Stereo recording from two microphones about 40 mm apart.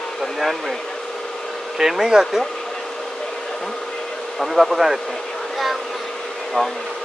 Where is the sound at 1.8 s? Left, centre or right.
Centre.